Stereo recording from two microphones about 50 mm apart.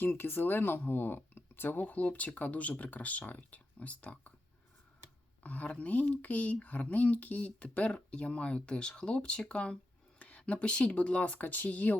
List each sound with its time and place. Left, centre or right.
0.0 s speech: left
5.4 s speech: left